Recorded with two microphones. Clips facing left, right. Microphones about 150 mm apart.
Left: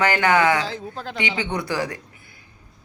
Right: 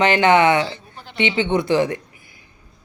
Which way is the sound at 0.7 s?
90° left.